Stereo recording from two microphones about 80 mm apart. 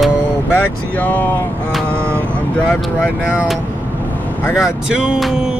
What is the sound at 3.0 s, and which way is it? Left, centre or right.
Speech, centre.